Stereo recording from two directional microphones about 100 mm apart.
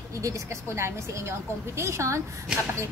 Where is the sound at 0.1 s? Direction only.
30° right (ahead or behind).